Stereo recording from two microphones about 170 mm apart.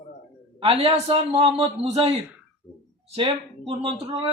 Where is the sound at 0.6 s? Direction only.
35° right (ahead or behind).